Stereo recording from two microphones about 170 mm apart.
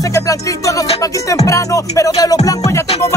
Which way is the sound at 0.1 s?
20° left (ahead or behind).